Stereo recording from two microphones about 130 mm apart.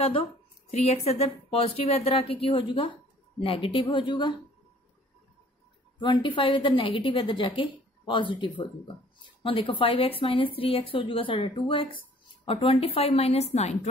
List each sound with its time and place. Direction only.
0.0 s a woman's voice: 50° left (ahead or behind)
5.9 s a woman's voice: 35° left (ahead or behind); by 13.7 s 55° left (ahead or behind)